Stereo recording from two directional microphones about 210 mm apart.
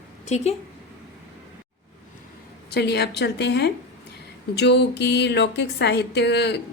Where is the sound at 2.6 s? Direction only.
50° left (ahead or behind).